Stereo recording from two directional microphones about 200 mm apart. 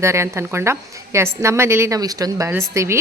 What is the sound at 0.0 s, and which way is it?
A woman's voice, 15° right (ahead or behind).